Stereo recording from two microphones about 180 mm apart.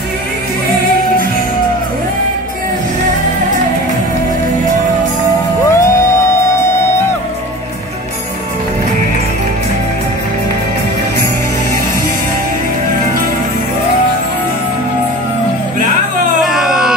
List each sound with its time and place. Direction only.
5.7 s music: 15° left (ahead or behind)
16.4 s baby cry: centre (ahead or behind)